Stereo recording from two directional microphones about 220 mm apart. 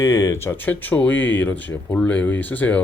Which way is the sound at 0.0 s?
15° left (ahead or behind).